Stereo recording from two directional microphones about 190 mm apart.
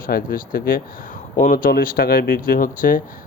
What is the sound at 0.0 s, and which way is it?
Speech, 50° left (ahead or behind).